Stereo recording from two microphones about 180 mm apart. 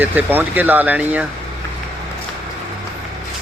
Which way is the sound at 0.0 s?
10° right (ahead or behind).